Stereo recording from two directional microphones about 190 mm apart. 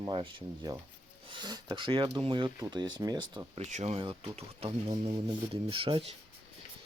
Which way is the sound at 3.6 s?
35° right (ahead or behind).